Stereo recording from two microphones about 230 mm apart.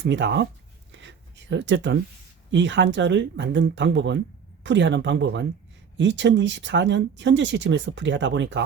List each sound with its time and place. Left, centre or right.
0.0 s speech: right
0.9 s a sound: right
2.5 s speech: right